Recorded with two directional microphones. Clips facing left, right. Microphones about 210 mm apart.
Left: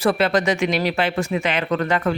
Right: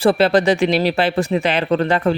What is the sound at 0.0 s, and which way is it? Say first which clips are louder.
Speech: right 5 dB; 30° right (ahead or behind).